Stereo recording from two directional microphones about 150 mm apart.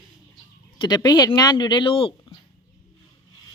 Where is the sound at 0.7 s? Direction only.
30° left (ahead or behind).